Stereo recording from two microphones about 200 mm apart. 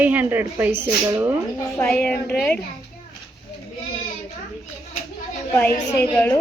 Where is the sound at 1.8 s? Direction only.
5° left (ahead or behind).